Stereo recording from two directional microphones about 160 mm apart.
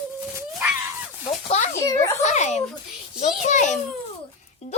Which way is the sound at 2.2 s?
50° left (ahead or behind).